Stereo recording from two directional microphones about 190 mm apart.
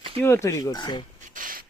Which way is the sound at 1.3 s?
45° right (ahead or behind).